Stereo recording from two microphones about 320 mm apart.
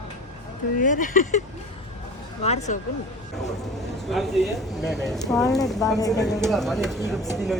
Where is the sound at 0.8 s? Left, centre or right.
Left.